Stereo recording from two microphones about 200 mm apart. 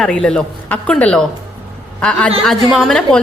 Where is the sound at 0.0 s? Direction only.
5° left (ahead or behind).